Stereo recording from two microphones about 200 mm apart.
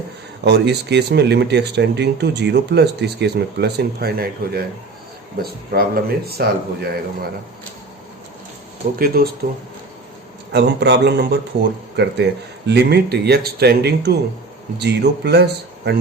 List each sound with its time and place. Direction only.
0.4 s speech: 60° right (ahead or behind)
9.0 s speech: 50° right (ahead or behind)
10.5 s speech: 55° right (ahead or behind)